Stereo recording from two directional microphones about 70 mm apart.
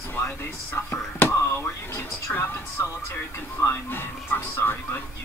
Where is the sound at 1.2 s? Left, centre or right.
Left.